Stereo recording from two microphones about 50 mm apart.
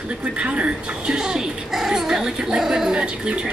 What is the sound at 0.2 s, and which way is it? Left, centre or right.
Speech, right.